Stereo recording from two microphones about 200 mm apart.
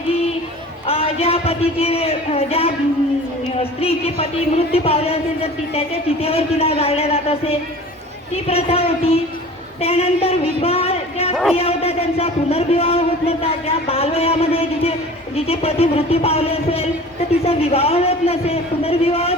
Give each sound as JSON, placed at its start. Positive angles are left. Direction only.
{"t": 0.9, "sound": "a man's voice", "side_deg": 30}
{"t": 10.6, "sound": "a sound", "side_deg": 30}
{"t": 11.5, "sound": "a man's voice", "side_deg": 30}